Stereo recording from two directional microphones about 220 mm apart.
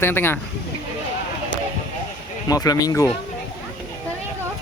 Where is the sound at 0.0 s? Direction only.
10° left (ahead or behind).